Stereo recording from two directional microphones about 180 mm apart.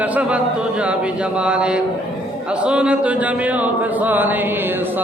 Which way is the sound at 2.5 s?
5° right (ahead or behind).